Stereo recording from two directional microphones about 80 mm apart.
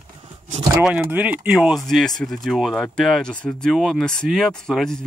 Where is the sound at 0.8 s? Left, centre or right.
Centre.